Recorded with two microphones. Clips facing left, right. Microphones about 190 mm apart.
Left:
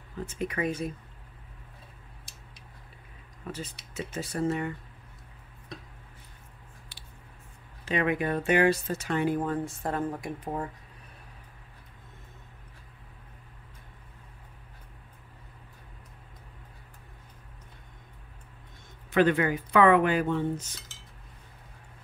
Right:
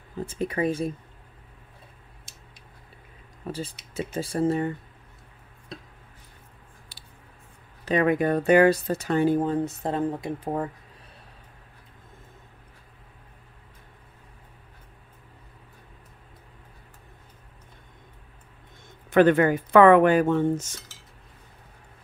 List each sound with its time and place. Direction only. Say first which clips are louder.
0.2 s speech: right 4 dB; 30° right (ahead or behind)
3.4 s speech: right 5 dB; 30° right (ahead or behind)
7.8 s speech: right 6 dB; 40° right (ahead or behind); by 10.5 s 20° right (ahead or behind)
19.1 s speech: right 6 dB; 50° right (ahead or behind)